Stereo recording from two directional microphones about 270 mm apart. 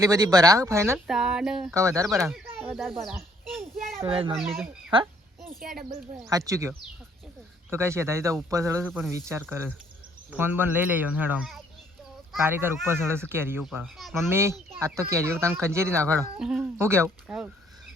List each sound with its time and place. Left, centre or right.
0.0 s speech: centre
2.1 s a child's voice: centre
4.0 s speech: centre
5.4 s a sound: centre
6.1 s speech: centre
8.9 s speech: centre